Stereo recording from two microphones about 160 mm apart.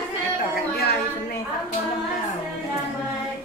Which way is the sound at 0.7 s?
90° left.